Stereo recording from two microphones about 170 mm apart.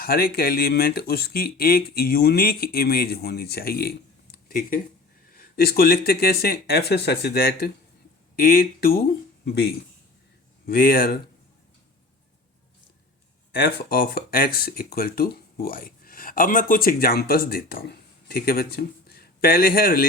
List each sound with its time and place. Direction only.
0.0 s speech: 60° left (ahead or behind)
13.5 s speech: 65° left (ahead or behind)